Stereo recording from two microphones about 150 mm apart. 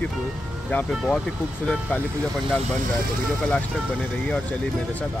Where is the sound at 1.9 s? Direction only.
15° left (ahead or behind).